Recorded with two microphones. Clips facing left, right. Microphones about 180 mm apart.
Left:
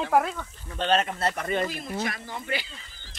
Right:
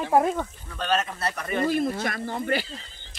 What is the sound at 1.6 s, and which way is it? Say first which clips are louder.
Speech: right 7 dB; 45° right (ahead or behind).